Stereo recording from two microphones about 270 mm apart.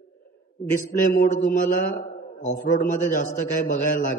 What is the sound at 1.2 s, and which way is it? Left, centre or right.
A man's voice, left.